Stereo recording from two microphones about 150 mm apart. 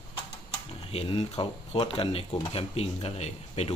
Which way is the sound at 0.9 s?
40° left (ahead or behind).